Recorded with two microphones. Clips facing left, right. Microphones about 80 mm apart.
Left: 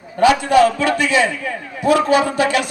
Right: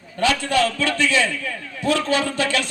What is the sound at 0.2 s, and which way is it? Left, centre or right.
A man's voice, centre.